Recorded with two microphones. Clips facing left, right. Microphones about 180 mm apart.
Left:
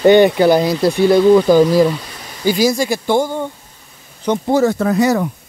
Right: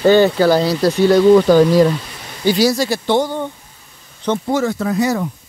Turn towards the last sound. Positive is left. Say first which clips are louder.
# left 3 dB
turn(degrees=75)  # may be behind; listen again after turning